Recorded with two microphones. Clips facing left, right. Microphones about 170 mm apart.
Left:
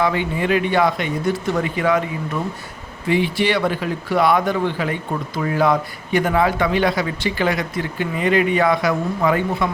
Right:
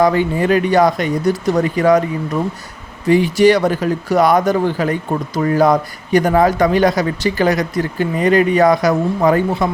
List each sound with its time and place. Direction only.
0.0 s a man's voice: 40° right (ahead or behind)